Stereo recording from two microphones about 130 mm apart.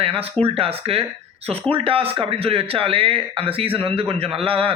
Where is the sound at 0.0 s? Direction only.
45° right (ahead or behind).